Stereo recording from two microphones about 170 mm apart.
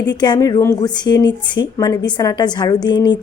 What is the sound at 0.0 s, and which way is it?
A woman's voice, 25° left (ahead or behind).